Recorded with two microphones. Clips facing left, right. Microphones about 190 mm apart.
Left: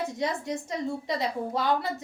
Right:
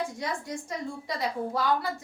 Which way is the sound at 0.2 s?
20° left (ahead or behind).